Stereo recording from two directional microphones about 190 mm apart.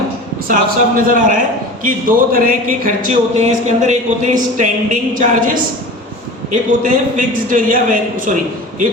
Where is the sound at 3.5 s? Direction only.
40° right (ahead or behind).